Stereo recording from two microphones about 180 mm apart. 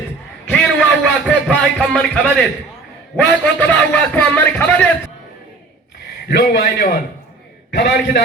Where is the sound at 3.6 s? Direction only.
10° left (ahead or behind).